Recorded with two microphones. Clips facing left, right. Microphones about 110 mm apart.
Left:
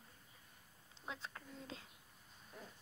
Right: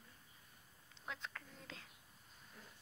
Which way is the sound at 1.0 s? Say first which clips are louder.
Even; 25° left (ahead or behind).